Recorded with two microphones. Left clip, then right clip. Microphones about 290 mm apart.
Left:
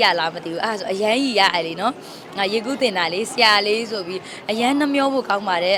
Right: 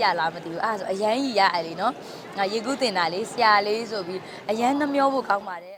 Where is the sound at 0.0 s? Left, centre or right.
Centre.